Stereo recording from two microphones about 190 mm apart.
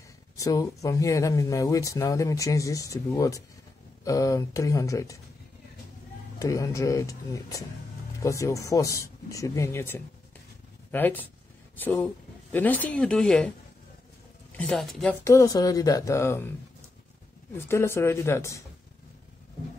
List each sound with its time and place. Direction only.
0.4 s speech: 20° left (ahead or behind)
6.4 s speech: 15° left (ahead or behind)
14.6 s speech: 5° left (ahead or behind)
15.2 s speech: 15° left (ahead or behind)
17.6 s speech: 15° left (ahead or behind)